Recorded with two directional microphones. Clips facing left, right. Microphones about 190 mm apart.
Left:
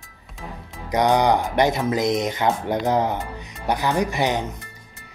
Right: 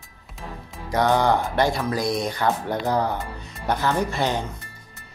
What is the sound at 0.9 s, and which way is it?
Speech, 15° left (ahead or behind).